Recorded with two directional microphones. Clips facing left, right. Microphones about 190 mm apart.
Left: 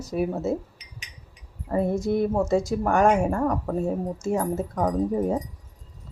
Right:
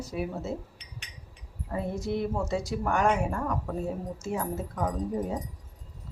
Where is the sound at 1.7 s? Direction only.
45° left (ahead or behind).